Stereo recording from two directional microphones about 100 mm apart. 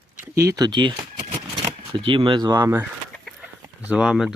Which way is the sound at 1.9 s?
60° right (ahead or behind).